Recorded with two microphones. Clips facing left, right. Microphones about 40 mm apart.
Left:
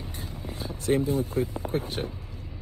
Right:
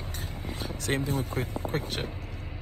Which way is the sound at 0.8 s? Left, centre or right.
Right.